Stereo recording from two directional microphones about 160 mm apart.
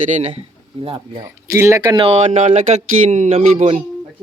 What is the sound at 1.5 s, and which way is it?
Speech, 20° right (ahead or behind).